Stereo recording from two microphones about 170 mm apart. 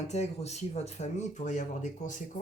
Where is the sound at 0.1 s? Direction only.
40° left (ahead or behind).